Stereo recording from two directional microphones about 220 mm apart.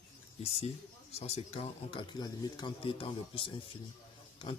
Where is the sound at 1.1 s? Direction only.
30° left (ahead or behind).